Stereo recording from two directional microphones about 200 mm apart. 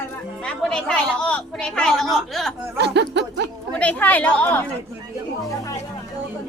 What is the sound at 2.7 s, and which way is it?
Snicker, 60° right (ahead or behind).